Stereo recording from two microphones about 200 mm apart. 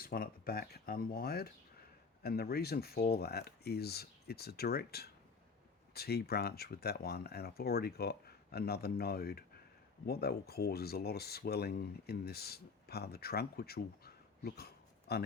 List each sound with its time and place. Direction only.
0.0 s speech: 50° left (ahead or behind)